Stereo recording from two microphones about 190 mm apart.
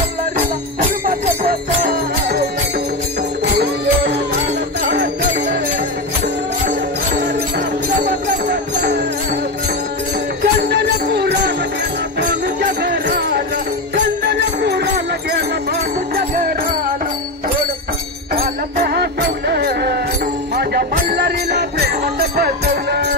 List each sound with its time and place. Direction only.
1.0 s jingle bell: 50° right (ahead or behind)
6.2 s music: 45° right (ahead or behind)
8.5 s music: 60° right (ahead or behind)
10.4 s music: 65° right (ahead or behind)
12.2 s jingle bell: 60° right (ahead or behind)
13.9 s music: 60° right (ahead or behind)
18.3 s music: 55° right (ahead or behind)